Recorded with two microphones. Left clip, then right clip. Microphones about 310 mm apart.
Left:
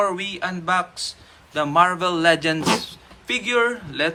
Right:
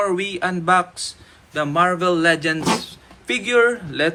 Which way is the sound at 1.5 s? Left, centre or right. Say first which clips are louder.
Left 1 dB; centre.